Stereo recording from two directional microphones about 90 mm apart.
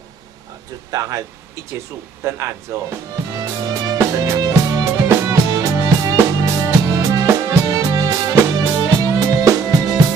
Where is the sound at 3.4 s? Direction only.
45° right (ahead or behind).